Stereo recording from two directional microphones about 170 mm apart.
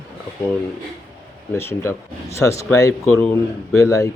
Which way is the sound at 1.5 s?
15° left (ahead or behind).